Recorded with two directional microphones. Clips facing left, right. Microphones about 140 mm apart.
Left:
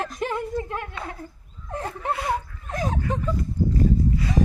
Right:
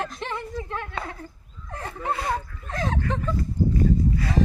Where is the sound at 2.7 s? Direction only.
10° left (ahead or behind).